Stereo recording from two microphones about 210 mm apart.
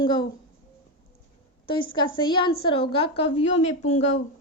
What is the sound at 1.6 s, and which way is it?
A woman's voice, 25° left (ahead or behind).